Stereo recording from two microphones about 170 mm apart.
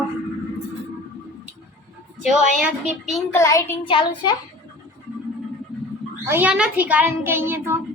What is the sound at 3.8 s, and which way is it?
Speech, 30° left (ahead or behind).